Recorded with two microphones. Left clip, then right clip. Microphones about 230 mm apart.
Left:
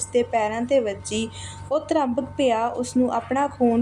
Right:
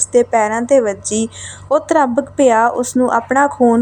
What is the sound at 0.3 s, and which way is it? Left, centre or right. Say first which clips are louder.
A woman's voice: right 8 dB; right.